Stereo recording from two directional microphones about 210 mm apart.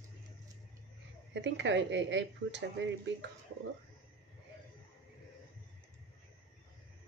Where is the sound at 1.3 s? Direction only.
60° right (ahead or behind).